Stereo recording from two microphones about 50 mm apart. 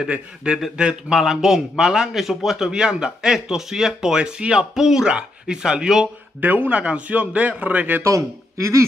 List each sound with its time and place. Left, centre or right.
0.7 s speech: right
1.1 s a man's voice: centre
6.4 s a man's voice: right
6.8 s a man's voice: right
8.0 s speech: right